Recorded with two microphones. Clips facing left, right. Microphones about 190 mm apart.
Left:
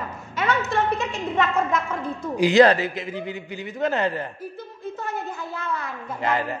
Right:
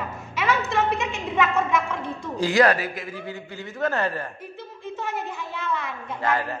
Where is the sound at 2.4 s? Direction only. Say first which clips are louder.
Left 4 dB; 25° left (ahead or behind).